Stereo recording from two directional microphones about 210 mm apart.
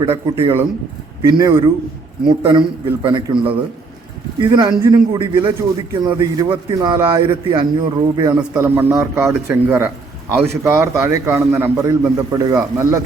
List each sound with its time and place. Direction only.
0.0 s a man's voice: 20° right (ahead or behind)